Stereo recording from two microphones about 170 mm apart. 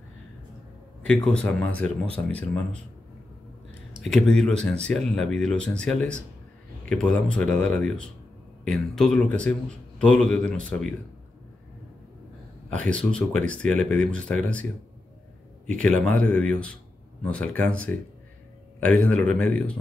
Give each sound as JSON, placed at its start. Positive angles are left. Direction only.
{"t": 1.0, "sound": "a man's voice", "side_deg": 5}
{"t": 4.0, "sound": "a man's voice", "side_deg": 0}
{"t": 12.6, "sound": "a man's voice", "side_deg": 5}
{"t": 15.8, "sound": "a man's voice", "side_deg": 5}